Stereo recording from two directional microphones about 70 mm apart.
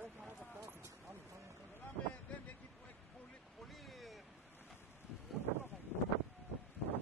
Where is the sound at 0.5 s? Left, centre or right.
Right.